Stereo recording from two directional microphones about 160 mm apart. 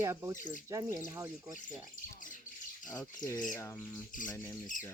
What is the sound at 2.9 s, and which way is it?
Speech, 25° left (ahead or behind).